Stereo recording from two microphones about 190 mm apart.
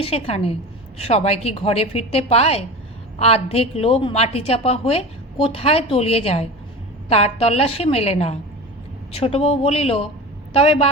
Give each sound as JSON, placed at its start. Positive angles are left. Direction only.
{"t": 0.0, "sound": "a woman's voice", "side_deg": 30}